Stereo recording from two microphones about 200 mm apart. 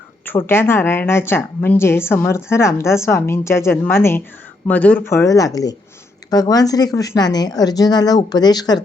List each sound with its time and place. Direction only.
0.3 s a woman's voice: 10° left (ahead or behind)